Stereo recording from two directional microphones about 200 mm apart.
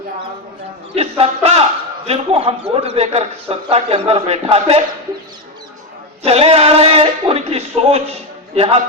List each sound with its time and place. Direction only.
0.9 s a man's voice: 30° right (ahead or behind)
6.2 s a man's voice: 30° right (ahead or behind)